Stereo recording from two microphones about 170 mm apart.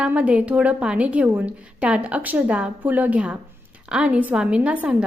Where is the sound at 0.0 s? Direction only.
5° right (ahead or behind).